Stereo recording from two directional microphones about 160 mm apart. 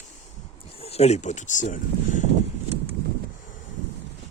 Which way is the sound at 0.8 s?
40° left (ahead or behind).